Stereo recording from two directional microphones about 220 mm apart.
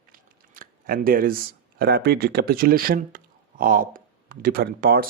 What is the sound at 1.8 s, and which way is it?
Speech, 45° right (ahead or behind).